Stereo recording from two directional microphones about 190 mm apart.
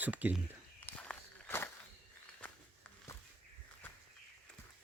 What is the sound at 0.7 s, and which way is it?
Walk, 10° left (ahead or behind).